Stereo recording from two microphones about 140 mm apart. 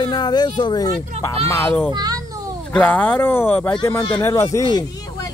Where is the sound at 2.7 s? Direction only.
10° left (ahead or behind).